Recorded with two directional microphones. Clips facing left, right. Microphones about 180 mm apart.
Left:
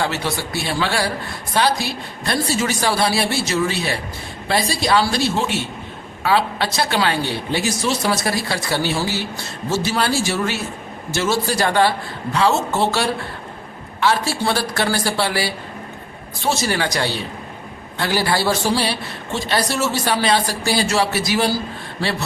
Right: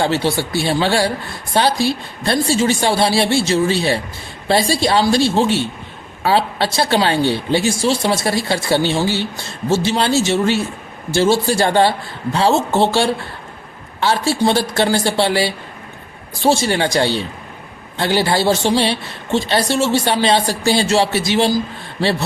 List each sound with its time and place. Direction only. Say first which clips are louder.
0.0 s a woman's voice: right 5 dB; 30° right (ahead or behind)